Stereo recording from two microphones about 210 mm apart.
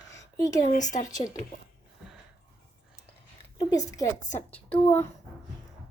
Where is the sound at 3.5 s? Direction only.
15° left (ahead or behind).